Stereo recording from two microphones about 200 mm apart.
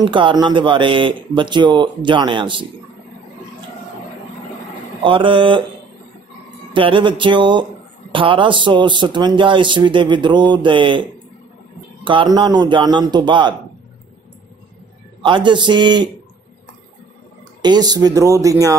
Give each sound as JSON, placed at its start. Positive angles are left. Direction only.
{"t": 0.0, "sound": "speech", "side_deg": -25}
{"t": 5.0, "sound": "speech", "side_deg": -25}
{"t": 6.7, "sound": "a man's voice", "side_deg": -25}
{"t": 15.2, "sound": "speech", "side_deg": -25}
{"t": 17.6, "sound": "speech", "side_deg": -20}